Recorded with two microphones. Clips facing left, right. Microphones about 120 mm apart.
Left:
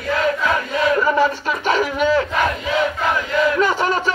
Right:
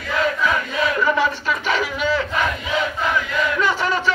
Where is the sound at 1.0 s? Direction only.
40° left (ahead or behind).